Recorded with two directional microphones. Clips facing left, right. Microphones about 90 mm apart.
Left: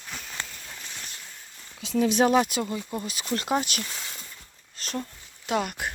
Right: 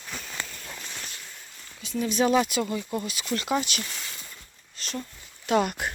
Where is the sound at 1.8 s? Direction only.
90° left.